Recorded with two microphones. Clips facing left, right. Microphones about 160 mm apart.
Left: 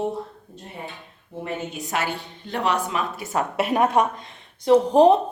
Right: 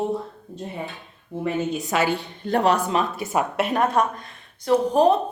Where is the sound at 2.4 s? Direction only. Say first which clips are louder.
Right 4 dB; 40° right (ahead or behind).